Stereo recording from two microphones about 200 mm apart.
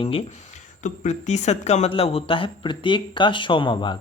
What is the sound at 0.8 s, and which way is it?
A man's voice, 35° left (ahead or behind).